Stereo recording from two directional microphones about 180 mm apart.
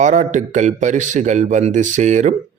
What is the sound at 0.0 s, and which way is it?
A man's voice, 45° right (ahead or behind).